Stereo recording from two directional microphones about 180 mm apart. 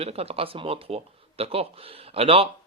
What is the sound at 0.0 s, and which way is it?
Speech, 35° right (ahead or behind).